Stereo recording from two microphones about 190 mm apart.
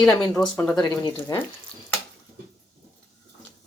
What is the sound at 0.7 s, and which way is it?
Speech, 20° left (ahead or behind).